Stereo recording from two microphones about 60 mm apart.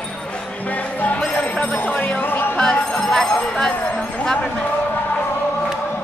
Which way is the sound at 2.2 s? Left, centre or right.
Left.